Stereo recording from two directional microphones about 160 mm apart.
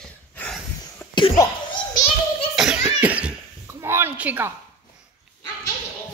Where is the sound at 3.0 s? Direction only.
10° right (ahead or behind).